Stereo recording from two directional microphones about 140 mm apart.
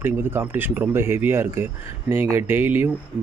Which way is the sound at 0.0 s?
15° right (ahead or behind).